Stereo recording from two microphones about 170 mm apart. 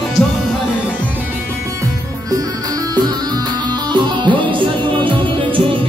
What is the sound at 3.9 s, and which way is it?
Music, 30° right (ahead or behind).